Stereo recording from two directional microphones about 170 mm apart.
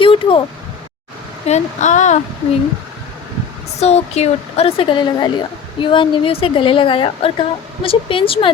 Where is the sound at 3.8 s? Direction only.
40° left (ahead or behind).